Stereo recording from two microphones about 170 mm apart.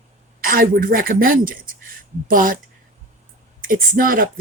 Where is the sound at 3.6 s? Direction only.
55° right (ahead or behind).